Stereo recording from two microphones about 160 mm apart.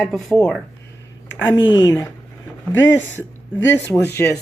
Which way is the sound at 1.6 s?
25° left (ahead or behind).